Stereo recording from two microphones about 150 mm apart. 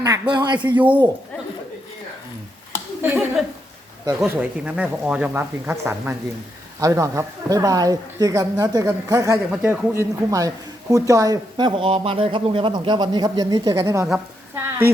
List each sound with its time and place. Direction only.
0.0 s speech: 25° right (ahead or behind)
0.8 s speech: 10° right (ahead or behind)
3.0 s speech: 15° right (ahead or behind)
9.5 s speech: 10° right (ahead or behind)